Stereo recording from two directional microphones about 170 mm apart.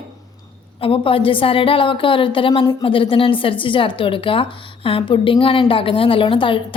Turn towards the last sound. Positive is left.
turn(degrees=30)  # may be behind; listen again after turning